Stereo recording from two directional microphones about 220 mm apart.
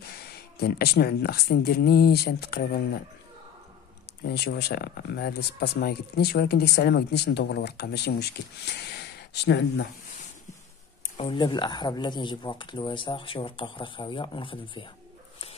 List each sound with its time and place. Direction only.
0.0 s speech: 45° left (ahead or behind)
4.2 s speech: 45° left (ahead or behind)
11.1 s speech: 25° left (ahead or behind)